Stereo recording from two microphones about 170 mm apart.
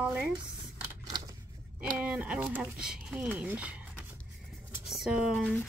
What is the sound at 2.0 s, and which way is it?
Speech, 5° right (ahead or behind).